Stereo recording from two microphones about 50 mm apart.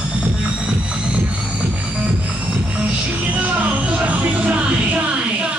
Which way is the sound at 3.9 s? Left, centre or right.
Right.